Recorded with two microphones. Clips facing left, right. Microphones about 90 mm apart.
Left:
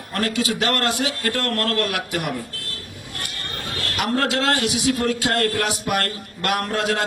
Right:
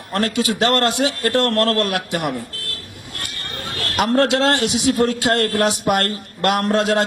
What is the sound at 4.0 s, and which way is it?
A man's voice, 25° right (ahead or behind).